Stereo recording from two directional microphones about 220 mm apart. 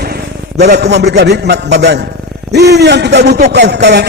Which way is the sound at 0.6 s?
50° right (ahead or behind).